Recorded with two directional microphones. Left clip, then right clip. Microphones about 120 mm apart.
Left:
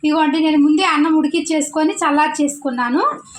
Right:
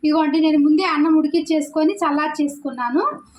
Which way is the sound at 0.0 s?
40° left (ahead or behind).